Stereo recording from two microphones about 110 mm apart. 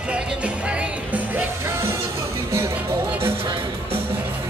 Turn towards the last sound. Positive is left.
turn(degrees=-20)  # may be behind; listen again after turning